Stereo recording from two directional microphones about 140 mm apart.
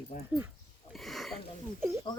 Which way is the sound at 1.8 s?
20° right (ahead or behind).